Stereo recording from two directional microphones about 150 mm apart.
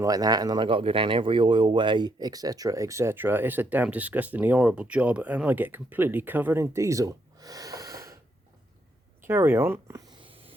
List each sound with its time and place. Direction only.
0.0 s speech: 25° right (ahead or behind)
9.2 s speech: 15° right (ahead or behind)
10.2 s hiss: 35° right (ahead or behind)